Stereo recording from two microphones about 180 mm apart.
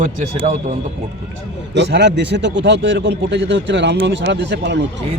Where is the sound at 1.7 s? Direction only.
75° right (ahead or behind).